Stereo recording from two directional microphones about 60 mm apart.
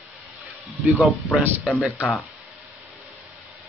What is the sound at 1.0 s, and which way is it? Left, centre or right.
Speech, centre.